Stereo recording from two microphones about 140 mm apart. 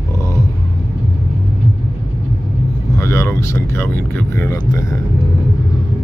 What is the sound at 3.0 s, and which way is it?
Speech, 20° left (ahead or behind).